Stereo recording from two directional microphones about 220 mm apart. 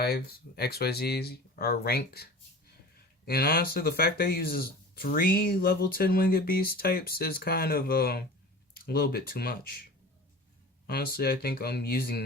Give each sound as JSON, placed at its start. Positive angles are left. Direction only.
{"t": 0.0, "sound": "speech", "side_deg": 45}
{"t": 3.2, "sound": "speech", "side_deg": 45}
{"t": 10.8, "sound": "speech", "side_deg": 45}